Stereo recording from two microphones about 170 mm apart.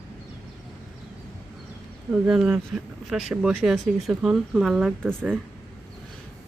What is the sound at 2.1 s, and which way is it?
Speech, 5° right (ahead or behind).